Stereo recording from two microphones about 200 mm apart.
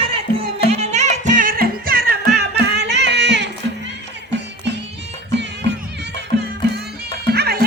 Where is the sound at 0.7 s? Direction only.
35° right (ahead or behind); by 3.5 s 60° right (ahead or behind).